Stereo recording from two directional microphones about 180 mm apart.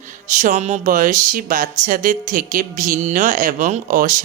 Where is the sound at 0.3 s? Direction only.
45° right (ahead or behind).